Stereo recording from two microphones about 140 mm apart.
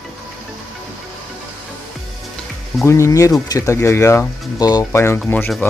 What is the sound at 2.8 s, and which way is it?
Speech, 20° left (ahead or behind).